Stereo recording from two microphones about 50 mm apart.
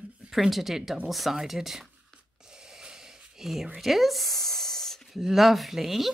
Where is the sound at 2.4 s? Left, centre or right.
Centre.